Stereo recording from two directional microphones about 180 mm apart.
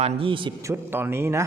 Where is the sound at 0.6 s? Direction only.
10° right (ahead or behind).